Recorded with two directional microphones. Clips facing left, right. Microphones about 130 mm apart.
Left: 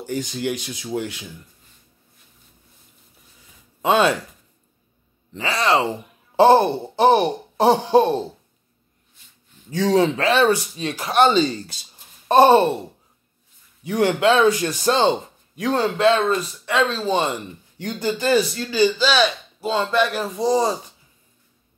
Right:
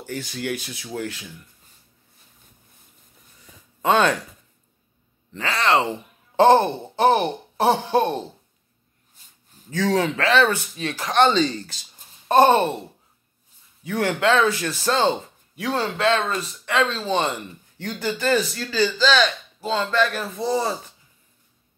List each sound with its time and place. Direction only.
0.0 s speech: 15° left (ahead or behind)
3.8 s speech: 10° left (ahead or behind)
5.3 s speech: 15° left (ahead or behind)
7.5 s a sound: 25° left (ahead or behind)
9.7 s speech: 15° left (ahead or behind)
13.8 s speech: 15° left (ahead or behind)